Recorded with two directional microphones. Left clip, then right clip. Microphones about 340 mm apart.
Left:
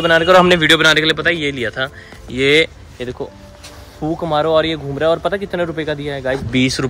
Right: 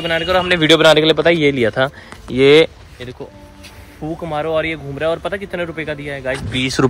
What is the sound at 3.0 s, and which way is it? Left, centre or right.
Speech, centre.